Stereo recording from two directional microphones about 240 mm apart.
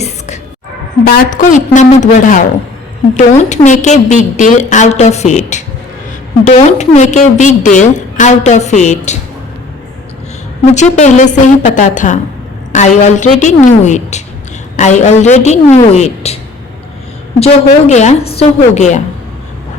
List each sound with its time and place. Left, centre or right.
1.0 s a woman's voice: left
10.8 s a woman's voice: left
17.4 s a woman's voice: left